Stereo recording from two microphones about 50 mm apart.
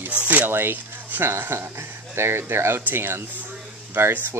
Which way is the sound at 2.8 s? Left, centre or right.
Right.